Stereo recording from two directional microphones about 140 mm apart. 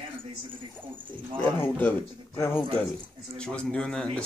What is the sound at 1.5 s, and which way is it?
Speech, 15° left (ahead or behind).